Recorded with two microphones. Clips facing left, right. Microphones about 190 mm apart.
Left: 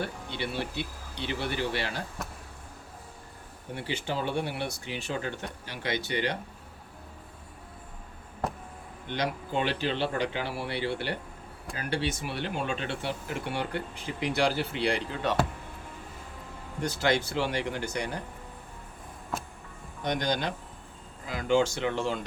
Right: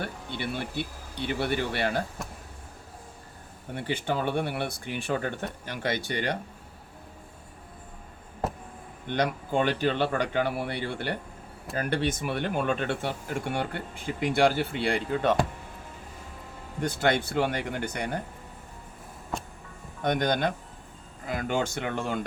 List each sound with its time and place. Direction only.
0.0 s speech: 50° right (ahead or behind)
2.2 s vehicle: centre (ahead or behind)
3.8 s speech: 50° right (ahead or behind)
9.0 s speech: 50° right (ahead or behind)
16.8 s speech: 55° right (ahead or behind)
19.3 s music: 5° left (ahead or behind)
20.0 s speech: 55° right (ahead or behind)